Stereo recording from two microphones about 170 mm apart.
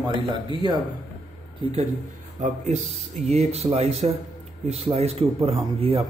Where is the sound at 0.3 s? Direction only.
25° right (ahead or behind).